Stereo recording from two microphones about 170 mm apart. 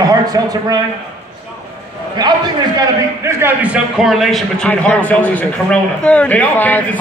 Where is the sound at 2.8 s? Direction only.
15° right (ahead or behind).